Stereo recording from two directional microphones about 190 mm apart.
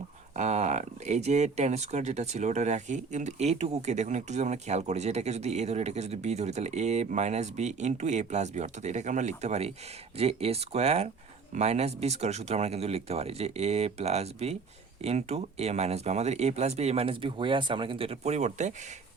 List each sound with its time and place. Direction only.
0.3 s speech: 35° right (ahead or behind)